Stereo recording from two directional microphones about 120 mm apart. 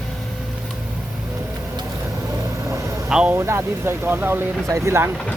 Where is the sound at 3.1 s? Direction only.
5° right (ahead or behind).